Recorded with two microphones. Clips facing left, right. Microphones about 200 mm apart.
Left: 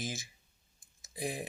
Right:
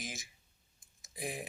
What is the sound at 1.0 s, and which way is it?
Tick-tock, 30° left (ahead or behind).